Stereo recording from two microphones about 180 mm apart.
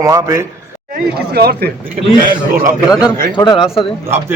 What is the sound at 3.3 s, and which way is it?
Speech, 25° left (ahead or behind).